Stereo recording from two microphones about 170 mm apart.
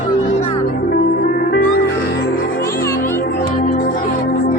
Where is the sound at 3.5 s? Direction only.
50° left (ahead or behind).